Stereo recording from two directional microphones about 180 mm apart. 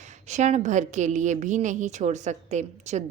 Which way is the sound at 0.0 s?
40° right (ahead or behind).